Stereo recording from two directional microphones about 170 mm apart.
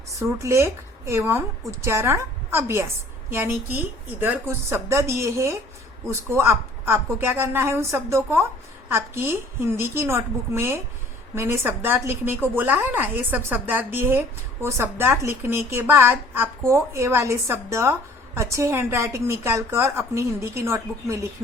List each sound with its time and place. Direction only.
0.1 s a woman's voice: 15° right (ahead or behind)